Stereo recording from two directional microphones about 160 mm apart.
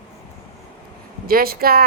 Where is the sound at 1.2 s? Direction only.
70° right (ahead or behind).